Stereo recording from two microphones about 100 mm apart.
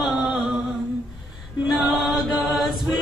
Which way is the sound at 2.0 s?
Centre (ahead or behind).